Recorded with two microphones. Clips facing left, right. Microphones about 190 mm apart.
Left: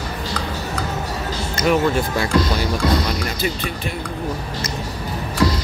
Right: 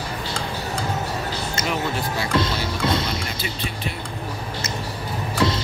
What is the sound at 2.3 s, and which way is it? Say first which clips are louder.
Music: left 4 dB; 25° right (ahead or behind).